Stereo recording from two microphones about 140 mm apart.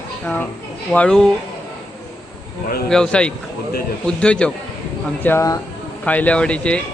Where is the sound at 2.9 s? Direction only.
5° left (ahead or behind).